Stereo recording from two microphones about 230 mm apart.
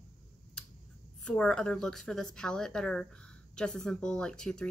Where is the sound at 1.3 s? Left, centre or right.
Centre.